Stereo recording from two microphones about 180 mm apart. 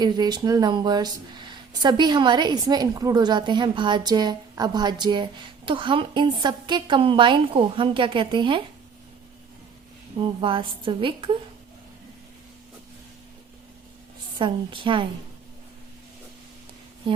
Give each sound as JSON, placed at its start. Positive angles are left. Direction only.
{"t": 0.0, "sound": "speech", "side_deg": -25}
{"t": 10.2, "sound": "speech", "side_deg": -30}
{"t": 14.3, "sound": "speech", "side_deg": -25}